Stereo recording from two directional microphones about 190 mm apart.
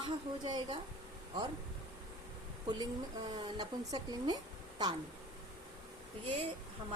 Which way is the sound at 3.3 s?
20° right (ahead or behind).